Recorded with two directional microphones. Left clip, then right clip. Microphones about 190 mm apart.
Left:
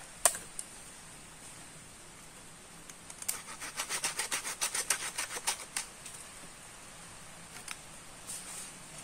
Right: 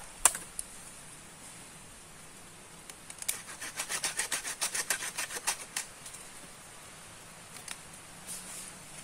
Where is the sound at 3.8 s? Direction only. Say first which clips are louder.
Right 1 dB; centre (ahead or behind).